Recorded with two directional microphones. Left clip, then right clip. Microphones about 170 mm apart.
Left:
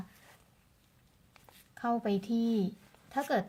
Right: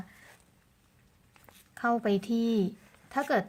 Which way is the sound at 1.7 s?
35° right (ahead or behind).